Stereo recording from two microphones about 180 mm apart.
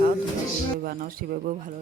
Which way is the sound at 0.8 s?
50° right (ahead or behind).